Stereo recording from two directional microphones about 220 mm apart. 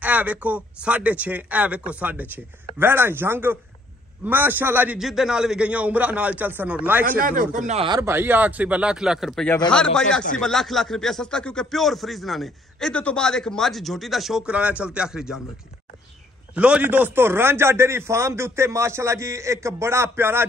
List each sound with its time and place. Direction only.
0.0 s speech: 5° right (ahead or behind)
7.1 s speech: 40° right (ahead or behind)
8.0 s speech: 10° right (ahead or behind)
16.5 s speech: 5° right (ahead or behind)